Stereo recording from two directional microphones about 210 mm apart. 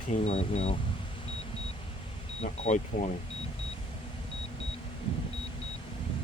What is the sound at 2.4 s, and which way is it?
Speech, 35° left (ahead or behind).